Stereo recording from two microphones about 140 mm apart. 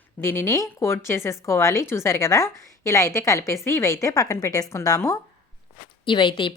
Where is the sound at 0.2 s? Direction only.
20° left (ahead or behind).